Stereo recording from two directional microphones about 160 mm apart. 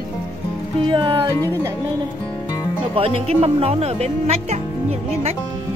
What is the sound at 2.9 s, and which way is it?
Speech, 40° right (ahead or behind).